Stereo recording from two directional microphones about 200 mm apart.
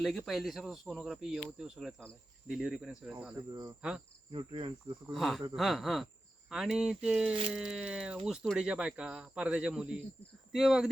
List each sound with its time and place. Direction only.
0.0 s speech: centre (ahead or behind)
3.5 s cricket: 20° right (ahead or behind)
5.1 s speech: centre (ahead or behind)